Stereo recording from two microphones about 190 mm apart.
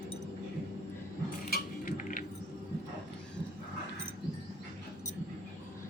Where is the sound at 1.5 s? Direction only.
45° left (ahead or behind).